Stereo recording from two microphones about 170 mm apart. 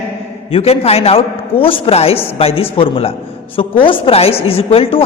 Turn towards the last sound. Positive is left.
turn(degrees=35)  # may be behind; listen again after turning